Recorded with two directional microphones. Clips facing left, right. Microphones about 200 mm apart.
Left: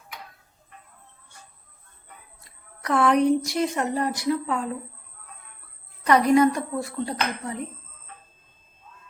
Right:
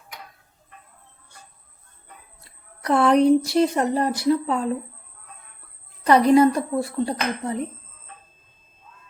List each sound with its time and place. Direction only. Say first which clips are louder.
2.8 s a woman's voice: right 3 dB; 30° right (ahead or behind)
6.1 s a woman's voice: right 3 dB; 30° right (ahead or behind)